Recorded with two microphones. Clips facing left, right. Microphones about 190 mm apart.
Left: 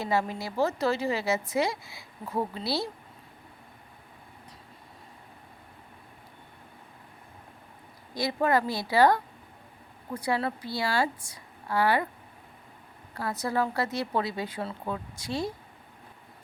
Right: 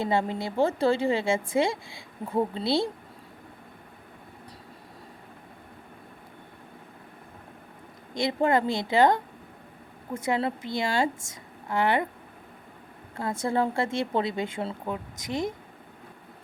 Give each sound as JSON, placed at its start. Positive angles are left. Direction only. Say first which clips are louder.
{"t": 0.0, "sound": "speech", "louder": "right 2 dB", "side_deg": -25}
{"t": 8.1, "sound": "speech", "louder": "right 2 dB", "side_deg": -25}
{"t": 13.1, "sound": "speech", "louder": "right 2 dB", "side_deg": -25}